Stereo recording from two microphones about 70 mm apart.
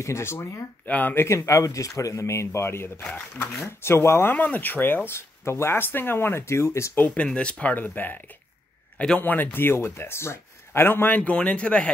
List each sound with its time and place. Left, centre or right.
0.0 s speech: left
0.8 s speech: left
4.3 s speech: left
7.2 s speech: centre
9.2 s speech: left
11.1 s speech: centre